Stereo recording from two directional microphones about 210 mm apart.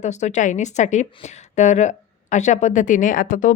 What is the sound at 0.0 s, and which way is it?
A woman's voice, 35° left (ahead or behind).